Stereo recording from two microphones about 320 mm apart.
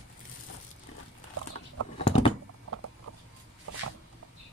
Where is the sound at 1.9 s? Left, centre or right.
Centre.